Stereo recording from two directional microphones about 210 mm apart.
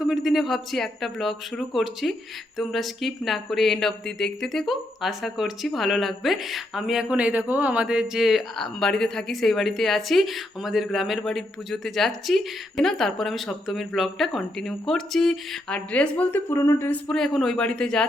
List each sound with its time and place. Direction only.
0.1 s speech: centre (ahead or behind)